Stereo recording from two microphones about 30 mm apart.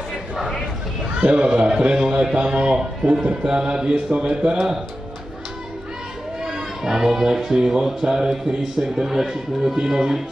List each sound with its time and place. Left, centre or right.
1.3 s a man's voice: right
6.4 s a man's voice: centre